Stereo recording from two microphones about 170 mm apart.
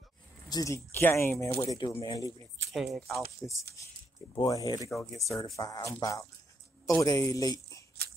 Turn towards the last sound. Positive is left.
turn(degrees=20)  # may be behind; listen again after turning